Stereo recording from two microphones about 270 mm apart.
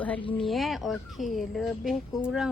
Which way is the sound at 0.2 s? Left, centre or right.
Centre.